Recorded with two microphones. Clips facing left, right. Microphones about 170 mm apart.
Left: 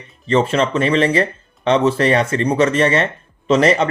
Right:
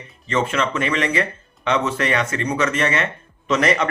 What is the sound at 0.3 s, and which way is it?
Speech, 30° left (ahead or behind).